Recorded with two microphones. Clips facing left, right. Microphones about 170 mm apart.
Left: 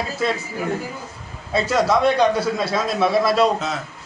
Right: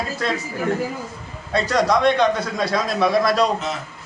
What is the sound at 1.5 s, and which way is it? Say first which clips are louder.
A man's voice: even; 5° left (ahead or behind).